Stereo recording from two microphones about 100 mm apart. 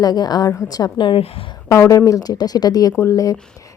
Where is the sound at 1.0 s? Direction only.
65° left (ahead or behind).